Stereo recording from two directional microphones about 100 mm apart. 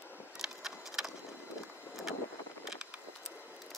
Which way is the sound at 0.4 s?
5° right (ahead or behind).